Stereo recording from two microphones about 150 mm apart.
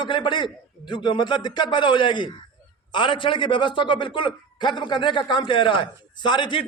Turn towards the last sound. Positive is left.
turn(degrees=30)  # may be behind; listen again after turning